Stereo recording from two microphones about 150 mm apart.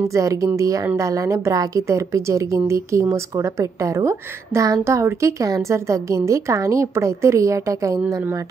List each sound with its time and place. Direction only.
0.1 s a woman's voice: 20° right (ahead or behind)